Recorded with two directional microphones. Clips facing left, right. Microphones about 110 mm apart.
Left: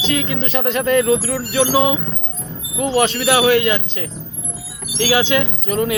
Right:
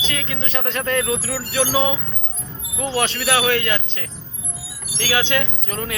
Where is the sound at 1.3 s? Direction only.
20° left (ahead or behind).